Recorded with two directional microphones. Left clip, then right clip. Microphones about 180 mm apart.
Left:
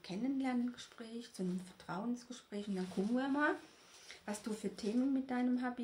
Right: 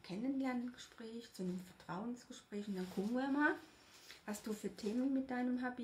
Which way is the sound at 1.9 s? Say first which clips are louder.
Left 4 dB; 15° left (ahead or behind).